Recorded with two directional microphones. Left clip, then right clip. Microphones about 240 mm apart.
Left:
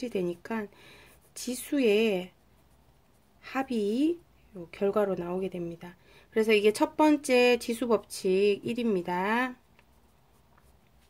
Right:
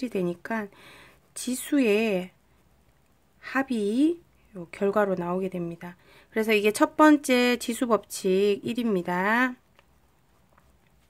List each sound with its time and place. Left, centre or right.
0.0 s a woman's voice: centre
3.3 s a woman's voice: centre